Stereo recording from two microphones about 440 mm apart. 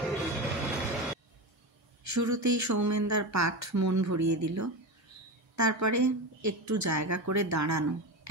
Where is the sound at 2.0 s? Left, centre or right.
Right.